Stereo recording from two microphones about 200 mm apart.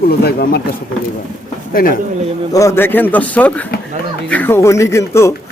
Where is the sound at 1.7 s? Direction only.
45° left (ahead or behind).